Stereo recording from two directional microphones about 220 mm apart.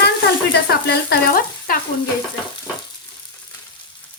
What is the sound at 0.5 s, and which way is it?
Frying, 45° left (ahead or behind).